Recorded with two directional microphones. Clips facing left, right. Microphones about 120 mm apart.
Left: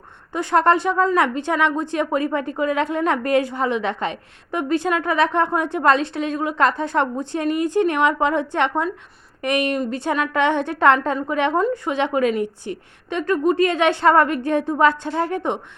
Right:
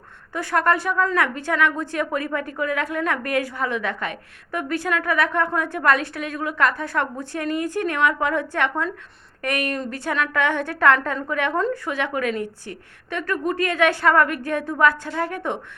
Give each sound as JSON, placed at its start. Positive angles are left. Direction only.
{"t": 0.3, "sound": "a woman's voice", "side_deg": 25}